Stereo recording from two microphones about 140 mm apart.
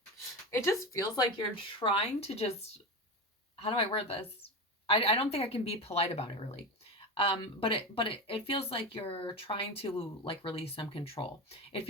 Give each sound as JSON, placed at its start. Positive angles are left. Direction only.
{"t": 0.5, "sound": "speech", "side_deg": 20}
{"t": 1.8, "sound": "a woman's voice", "side_deg": 45}